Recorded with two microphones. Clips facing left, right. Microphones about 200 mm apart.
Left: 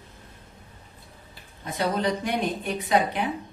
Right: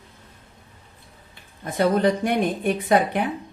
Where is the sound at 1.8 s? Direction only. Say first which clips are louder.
Right 6 dB; 50° right (ahead or behind).